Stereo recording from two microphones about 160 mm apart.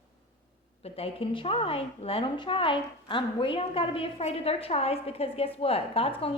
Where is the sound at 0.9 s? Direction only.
35° left (ahead or behind).